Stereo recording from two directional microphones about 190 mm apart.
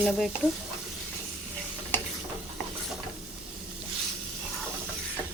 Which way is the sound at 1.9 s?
10° left (ahead or behind).